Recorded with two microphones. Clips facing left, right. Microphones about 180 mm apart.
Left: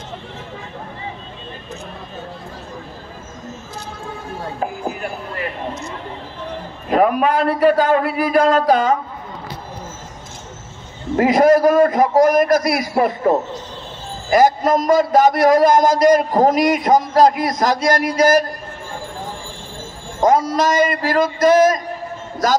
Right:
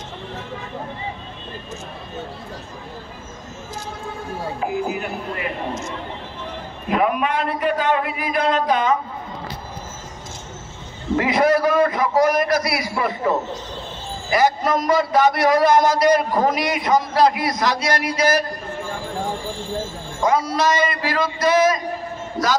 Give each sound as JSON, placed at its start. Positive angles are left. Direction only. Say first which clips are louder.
{"t": 6.9, "sound": "a man's voice", "louder": "left 5 dB", "side_deg": 40}
{"t": 11.1, "sound": "a man's voice", "louder": "left 5 dB", "side_deg": 45}
{"t": 20.2, "sound": "a man's voice", "louder": "left 4 dB", "side_deg": 45}